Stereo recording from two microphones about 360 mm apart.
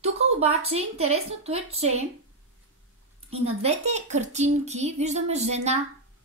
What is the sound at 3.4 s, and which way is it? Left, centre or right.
A woman's voice, centre.